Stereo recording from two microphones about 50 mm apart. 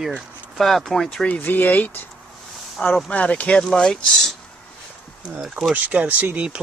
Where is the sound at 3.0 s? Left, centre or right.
Left.